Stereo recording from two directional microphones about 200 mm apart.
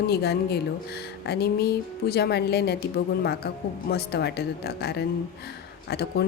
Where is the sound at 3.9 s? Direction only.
55° left (ahead or behind).